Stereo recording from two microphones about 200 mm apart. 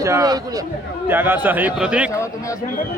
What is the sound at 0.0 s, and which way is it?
A man's voice, 15° right (ahead or behind).